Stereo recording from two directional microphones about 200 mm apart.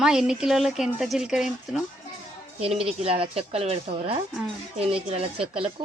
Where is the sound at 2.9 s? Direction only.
30° right (ahead or behind).